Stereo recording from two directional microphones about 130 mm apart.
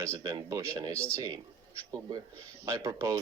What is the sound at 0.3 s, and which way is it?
Speech, 25° right (ahead or behind).